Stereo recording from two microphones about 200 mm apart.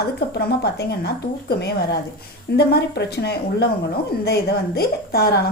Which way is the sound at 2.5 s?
55° left (ahead or behind).